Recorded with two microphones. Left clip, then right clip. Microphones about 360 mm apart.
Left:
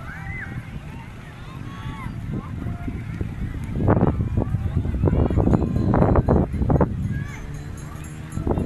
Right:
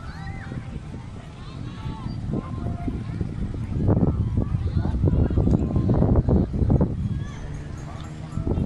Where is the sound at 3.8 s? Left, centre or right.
Left.